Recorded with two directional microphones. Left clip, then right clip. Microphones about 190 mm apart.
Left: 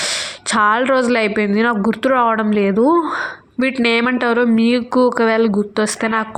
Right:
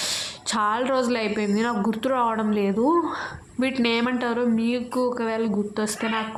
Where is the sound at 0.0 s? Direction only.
30° left (ahead or behind).